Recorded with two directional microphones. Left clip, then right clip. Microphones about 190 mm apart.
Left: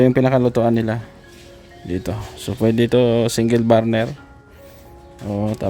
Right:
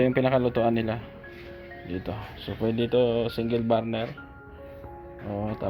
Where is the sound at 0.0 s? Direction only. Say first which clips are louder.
Left 7 dB; 50° left (ahead or behind).